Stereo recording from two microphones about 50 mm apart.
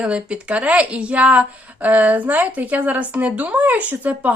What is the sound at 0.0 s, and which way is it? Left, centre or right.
A woman's voice, right.